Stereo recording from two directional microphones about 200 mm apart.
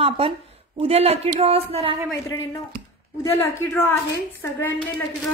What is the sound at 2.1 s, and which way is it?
Speech, 15° left (ahead or behind).